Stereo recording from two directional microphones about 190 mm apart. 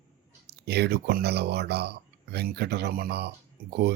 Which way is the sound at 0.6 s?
60° right (ahead or behind).